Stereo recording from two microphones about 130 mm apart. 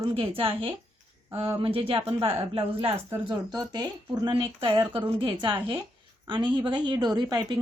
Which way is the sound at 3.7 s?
35° right (ahead or behind).